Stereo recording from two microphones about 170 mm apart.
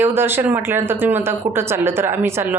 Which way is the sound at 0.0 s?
10° right (ahead or behind).